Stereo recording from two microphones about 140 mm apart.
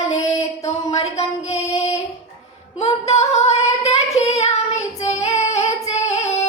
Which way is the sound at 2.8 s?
50° left (ahead or behind).